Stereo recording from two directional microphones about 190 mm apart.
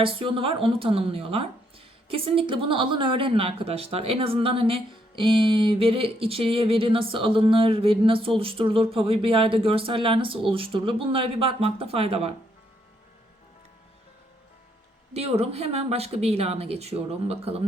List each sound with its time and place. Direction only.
0.0 s a woman's voice: 30° right (ahead or behind)
15.1 s speech: 35° right (ahead or behind)